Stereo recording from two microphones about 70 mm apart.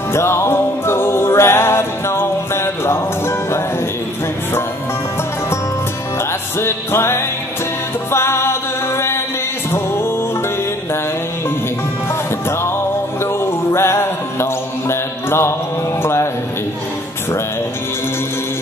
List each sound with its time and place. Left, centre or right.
0.1 s music: left
6.6 s music: left
13.2 s music: left
16.0 s a sound: left